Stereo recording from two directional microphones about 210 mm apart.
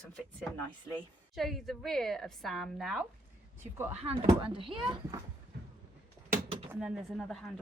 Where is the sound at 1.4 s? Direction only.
Centre (ahead or behind).